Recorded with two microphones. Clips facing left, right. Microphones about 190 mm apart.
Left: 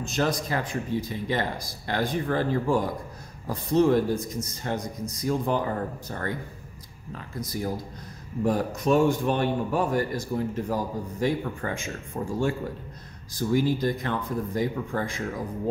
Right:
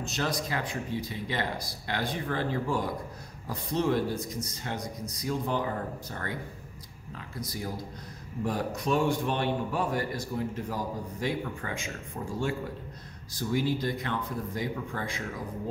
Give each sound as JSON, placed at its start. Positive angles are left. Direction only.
{"t": 0.0, "sound": "a man's voice", "side_deg": 50}
{"t": 13.4, "sound": "a man's voice", "side_deg": 45}